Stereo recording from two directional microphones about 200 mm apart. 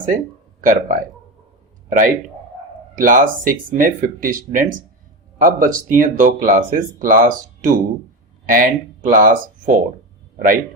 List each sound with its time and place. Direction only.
0.6 s a man's voice: 40° right (ahead or behind)